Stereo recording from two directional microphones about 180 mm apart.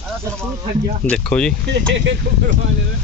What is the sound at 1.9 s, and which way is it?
Speech, 70° right (ahead or behind).